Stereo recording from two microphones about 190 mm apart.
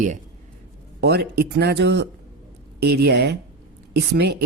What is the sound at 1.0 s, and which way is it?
Speech, 60° right (ahead or behind).